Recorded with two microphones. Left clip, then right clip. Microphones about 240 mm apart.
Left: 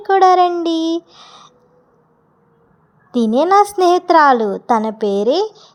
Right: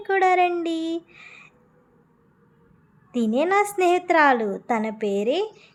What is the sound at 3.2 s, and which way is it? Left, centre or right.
Speech, left.